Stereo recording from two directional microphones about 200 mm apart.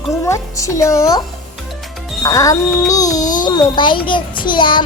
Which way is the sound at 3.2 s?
40° left (ahead or behind).